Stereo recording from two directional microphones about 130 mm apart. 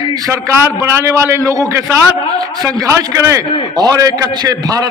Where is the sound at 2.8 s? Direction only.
25° right (ahead or behind).